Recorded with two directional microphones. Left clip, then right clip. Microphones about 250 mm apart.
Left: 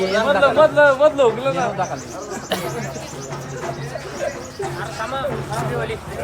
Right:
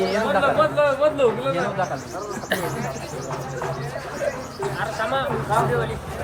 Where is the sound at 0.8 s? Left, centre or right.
Left.